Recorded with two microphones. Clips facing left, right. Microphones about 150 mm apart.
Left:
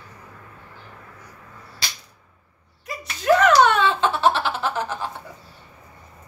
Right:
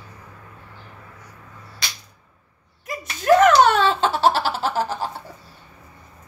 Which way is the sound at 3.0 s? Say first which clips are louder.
Right 3 dB; 45° right (ahead or behind).